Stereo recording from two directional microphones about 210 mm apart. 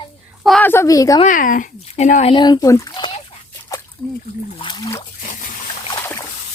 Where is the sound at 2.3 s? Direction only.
20° left (ahead or behind).